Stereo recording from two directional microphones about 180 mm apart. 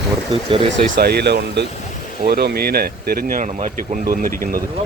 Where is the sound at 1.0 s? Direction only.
60° right (ahead or behind).